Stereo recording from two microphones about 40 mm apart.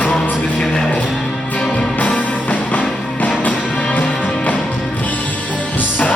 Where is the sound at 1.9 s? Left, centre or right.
Left.